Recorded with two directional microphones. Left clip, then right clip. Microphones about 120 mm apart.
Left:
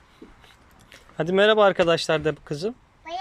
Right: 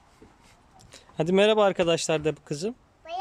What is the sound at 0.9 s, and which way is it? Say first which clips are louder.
Speech: left 1 dB; 30° right (ahead or behind).